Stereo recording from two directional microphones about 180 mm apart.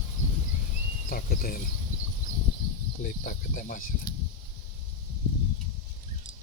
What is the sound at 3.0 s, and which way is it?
Cricket, 50° left (ahead or behind).